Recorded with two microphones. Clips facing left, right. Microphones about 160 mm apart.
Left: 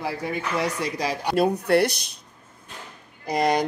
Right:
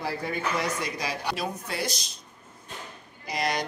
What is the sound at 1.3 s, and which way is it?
Speech, 60° left (ahead or behind).